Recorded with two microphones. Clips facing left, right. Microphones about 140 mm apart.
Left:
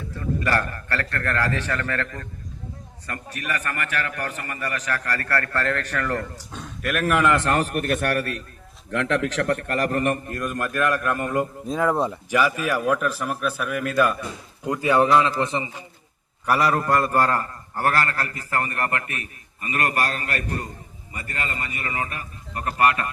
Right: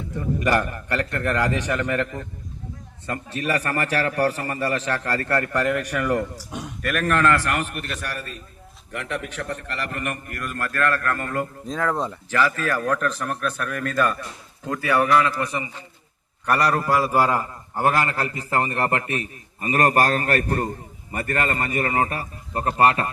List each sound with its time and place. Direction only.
0.1 s a man's voice: 20° right (ahead or behind)
6.8 s speech: centre (ahead or behind)
7.4 s a man's voice: 35° left (ahead or behind); by 8.4 s 65° left (ahead or behind)
8.9 s a man's voice: 90° left; by 14.2 s 5° left (ahead or behind)
14.6 s a man's voice: 15° left (ahead or behind)
16.5 s a man's voice: centre (ahead or behind); by 23.0 s 30° right (ahead or behind)